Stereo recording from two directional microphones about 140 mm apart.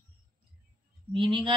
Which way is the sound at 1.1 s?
35° right (ahead or behind).